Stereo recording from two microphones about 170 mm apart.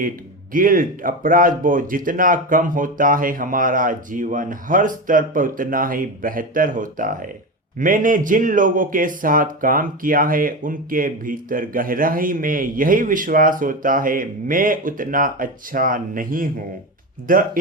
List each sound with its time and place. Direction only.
0.5 s a man's voice: 55° right (ahead or behind)